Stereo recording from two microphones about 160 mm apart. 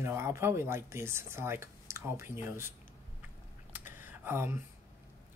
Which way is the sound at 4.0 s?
15° right (ahead or behind).